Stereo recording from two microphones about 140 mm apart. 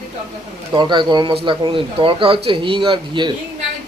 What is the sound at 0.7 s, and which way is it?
Speech, 35° right (ahead or behind).